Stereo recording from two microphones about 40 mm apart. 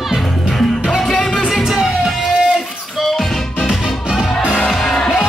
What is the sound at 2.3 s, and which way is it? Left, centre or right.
Music, centre.